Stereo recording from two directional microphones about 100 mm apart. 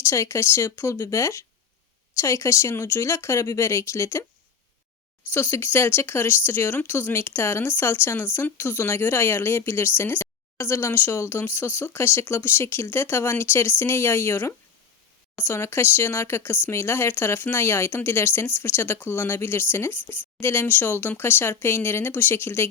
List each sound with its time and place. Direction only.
0.0 s speech: 30° left (ahead or behind)
5.3 s speech: 20° left (ahead or behind)